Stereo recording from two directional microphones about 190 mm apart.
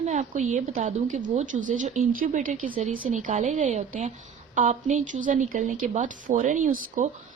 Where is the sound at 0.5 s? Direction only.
40° right (ahead or behind).